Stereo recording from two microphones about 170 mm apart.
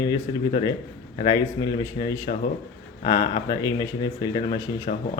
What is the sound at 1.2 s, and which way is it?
Speech, 20° left (ahead or behind).